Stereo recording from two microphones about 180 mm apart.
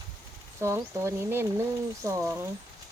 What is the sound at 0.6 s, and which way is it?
Speech, 15° right (ahead or behind).